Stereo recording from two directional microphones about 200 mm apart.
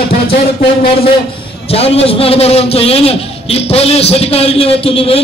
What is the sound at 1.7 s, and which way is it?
A man's voice, 30° left (ahead or behind).